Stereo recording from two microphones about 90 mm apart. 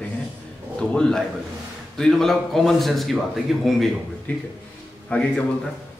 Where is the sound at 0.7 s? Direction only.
10° left (ahead or behind).